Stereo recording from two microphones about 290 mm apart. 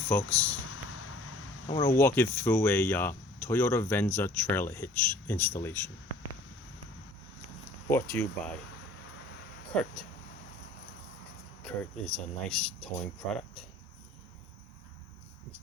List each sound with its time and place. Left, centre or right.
0.1 s speech: centre
0.9 s vehicle: left
1.6 s speech: centre
7.9 s speech: centre
9.7 s speech: centre
11.6 s speech: centre